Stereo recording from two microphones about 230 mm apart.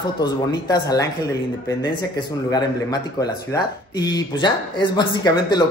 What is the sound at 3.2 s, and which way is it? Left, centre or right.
Speech, centre.